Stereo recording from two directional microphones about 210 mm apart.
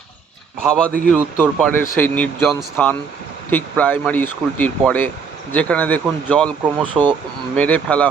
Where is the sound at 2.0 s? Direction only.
5° left (ahead or behind).